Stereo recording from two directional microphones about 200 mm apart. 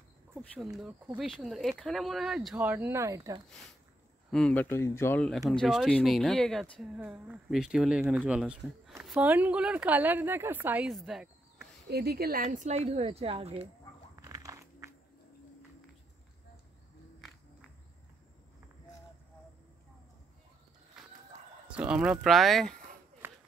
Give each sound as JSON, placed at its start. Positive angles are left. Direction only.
{"t": 0.7, "sound": "speech", "side_deg": -5}
{"t": 4.3, "sound": "speech", "side_deg": 5}
{"t": 11.9, "sound": "a woman's voice", "side_deg": -50}
{"t": 14.1, "sound": "walk", "side_deg": -15}
{"t": 21.0, "sound": "a sound", "side_deg": 0}
{"t": 21.6, "sound": "speech", "side_deg": -5}
{"t": 23.2, "sound": "a sound", "side_deg": -10}